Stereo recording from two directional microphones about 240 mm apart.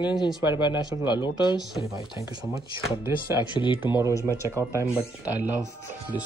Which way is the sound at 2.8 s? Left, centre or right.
Centre.